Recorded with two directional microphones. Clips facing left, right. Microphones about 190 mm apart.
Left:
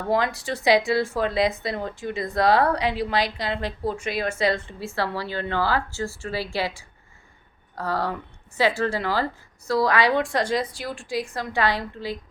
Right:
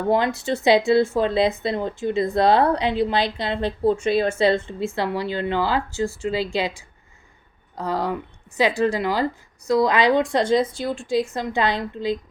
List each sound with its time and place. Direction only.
0.1 s a woman's voice: 25° right (ahead or behind)